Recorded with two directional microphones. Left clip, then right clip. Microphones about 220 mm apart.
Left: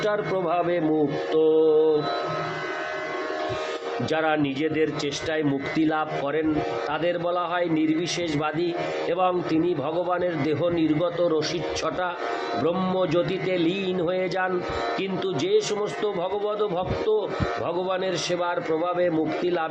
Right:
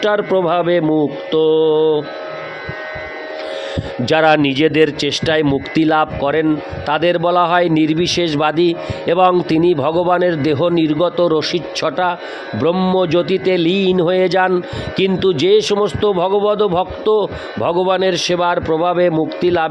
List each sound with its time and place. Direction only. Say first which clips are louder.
0.0 s a man's voice: right 10 dB; 45° right (ahead or behind)
4.1 s a man's voice: right 13 dB; 50° right (ahead or behind)